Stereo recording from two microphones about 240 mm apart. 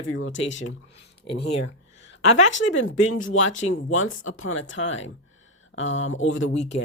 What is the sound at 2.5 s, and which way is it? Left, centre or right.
Speech, left.